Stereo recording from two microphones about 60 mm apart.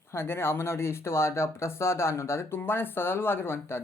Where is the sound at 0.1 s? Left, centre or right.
Left.